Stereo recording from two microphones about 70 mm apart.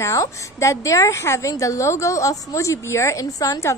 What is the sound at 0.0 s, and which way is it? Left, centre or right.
A woman's voice, left.